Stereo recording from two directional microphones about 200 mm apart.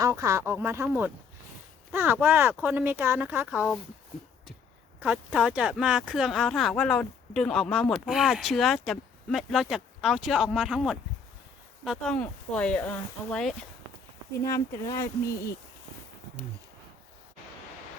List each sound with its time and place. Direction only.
0.0 s speech: 15° right (ahead or behind)
4.9 s speech: 5° right (ahead or behind)
14.4 s speech: 15° left (ahead or behind)